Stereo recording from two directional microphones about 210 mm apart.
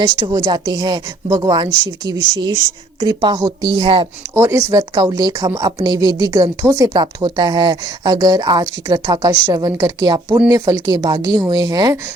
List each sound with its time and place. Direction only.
0.1 s a woman's voice: 20° right (ahead or behind)
3.0 s a woman's voice: 20° right (ahead or behind)
4.4 s a woman's voice: 10° right (ahead or behind)